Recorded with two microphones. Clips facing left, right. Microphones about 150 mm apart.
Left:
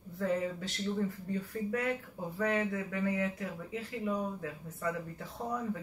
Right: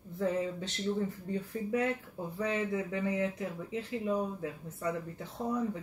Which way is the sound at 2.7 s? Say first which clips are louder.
Right 1 dB; 20° right (ahead or behind).